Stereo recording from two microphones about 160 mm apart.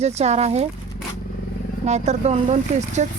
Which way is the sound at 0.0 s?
40° right (ahead or behind).